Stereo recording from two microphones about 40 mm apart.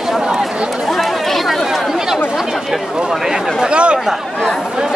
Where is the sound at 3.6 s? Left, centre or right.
Right.